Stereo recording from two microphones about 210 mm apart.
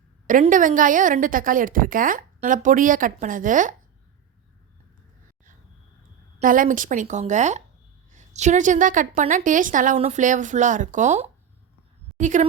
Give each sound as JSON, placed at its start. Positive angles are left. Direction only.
{"t": 0.3, "sound": "a woman's voice", "side_deg": -40}
{"t": 6.4, "sound": "a woman's voice", "side_deg": -40}